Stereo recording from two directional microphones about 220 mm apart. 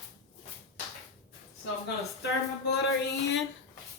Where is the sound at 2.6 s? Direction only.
50° left (ahead or behind).